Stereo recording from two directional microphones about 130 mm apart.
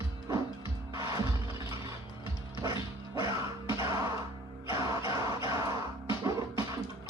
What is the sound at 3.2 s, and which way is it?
Music, 25° right (ahead or behind).